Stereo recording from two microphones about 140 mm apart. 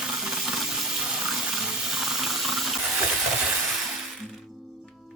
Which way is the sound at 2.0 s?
Centre (ahead or behind).